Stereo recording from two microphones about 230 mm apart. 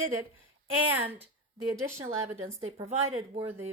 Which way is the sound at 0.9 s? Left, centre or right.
Centre.